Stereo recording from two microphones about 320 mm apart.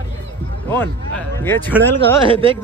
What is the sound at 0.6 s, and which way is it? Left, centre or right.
Speech, centre.